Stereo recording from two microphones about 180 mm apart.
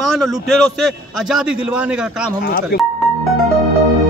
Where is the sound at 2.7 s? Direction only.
60° left (ahead or behind).